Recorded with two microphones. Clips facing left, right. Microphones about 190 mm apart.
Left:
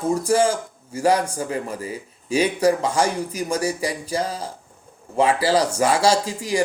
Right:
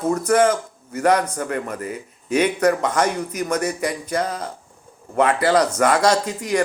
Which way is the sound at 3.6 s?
30° left (ahead or behind).